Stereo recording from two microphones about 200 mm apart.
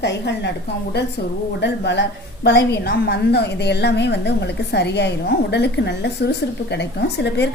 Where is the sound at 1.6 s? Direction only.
60° left (ahead or behind).